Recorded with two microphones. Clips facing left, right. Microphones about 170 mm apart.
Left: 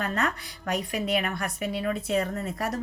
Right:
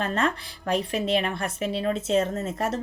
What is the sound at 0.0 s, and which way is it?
Speech, 30° right (ahead or behind).